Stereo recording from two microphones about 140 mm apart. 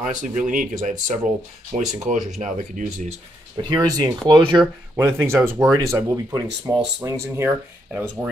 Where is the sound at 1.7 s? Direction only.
55° right (ahead or behind).